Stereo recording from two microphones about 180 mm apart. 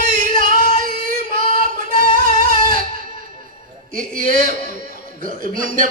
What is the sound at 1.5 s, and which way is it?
Singing, 50° right (ahead or behind).